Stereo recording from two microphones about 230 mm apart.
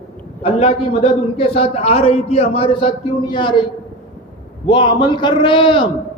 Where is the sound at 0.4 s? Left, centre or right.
Left.